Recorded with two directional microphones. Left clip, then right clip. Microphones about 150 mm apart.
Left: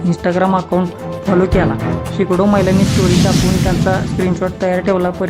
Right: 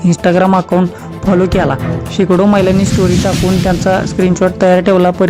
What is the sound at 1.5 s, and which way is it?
Speech, 40° right (ahead or behind).